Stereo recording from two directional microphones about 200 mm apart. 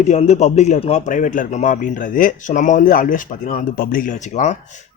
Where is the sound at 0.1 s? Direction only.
35° left (ahead or behind).